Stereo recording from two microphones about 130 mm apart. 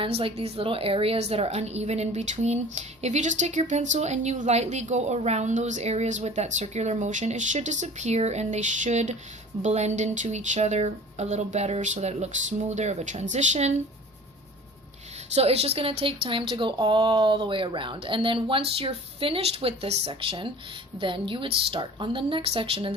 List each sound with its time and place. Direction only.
0.0 s a woman's voice: 45° right (ahead or behind); by 13.8 s 60° right (ahead or behind)
15.4 s speech: 50° right (ahead or behind)